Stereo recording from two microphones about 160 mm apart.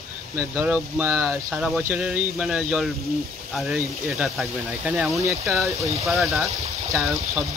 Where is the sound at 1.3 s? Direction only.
Centre (ahead or behind).